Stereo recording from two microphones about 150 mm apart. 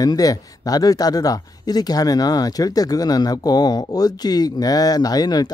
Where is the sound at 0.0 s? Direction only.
25° left (ahead or behind).